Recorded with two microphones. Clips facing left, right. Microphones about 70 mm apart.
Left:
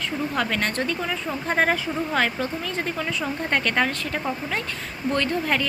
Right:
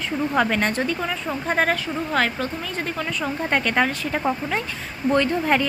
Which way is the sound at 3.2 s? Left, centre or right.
Centre.